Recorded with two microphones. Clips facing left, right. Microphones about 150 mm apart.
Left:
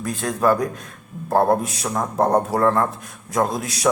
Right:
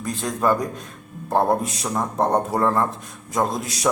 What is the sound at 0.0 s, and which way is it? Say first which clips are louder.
A man's voice: left 2 dB; centre (ahead or behind).